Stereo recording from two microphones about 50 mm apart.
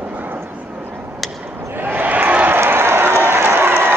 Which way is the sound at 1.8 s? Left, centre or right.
Right.